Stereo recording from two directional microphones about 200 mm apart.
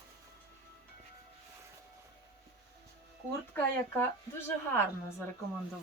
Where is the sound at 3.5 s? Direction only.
10° left (ahead or behind).